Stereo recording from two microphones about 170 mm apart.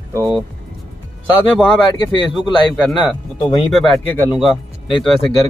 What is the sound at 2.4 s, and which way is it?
Speech, 25° left (ahead or behind).